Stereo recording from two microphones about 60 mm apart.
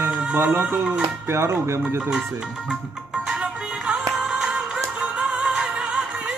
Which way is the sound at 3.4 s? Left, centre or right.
Centre.